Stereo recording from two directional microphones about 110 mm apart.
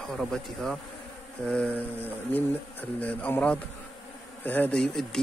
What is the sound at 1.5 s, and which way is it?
Speech, 15° left (ahead or behind).